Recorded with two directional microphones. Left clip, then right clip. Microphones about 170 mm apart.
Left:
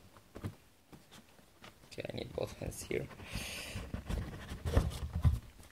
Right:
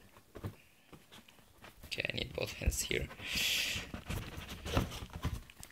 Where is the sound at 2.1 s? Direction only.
55° right (ahead or behind).